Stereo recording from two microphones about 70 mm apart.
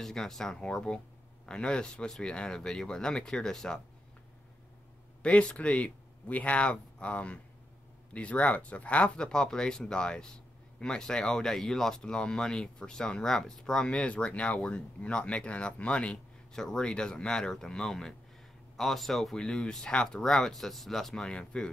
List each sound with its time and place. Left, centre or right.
0.0 s speech: centre
5.2 s speech: centre